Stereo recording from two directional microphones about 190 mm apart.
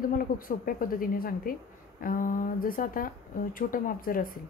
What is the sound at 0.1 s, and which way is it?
A woman's voice, 50° left (ahead or behind).